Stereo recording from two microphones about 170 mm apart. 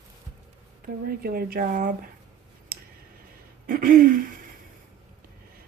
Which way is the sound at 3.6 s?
55° right (ahead or behind).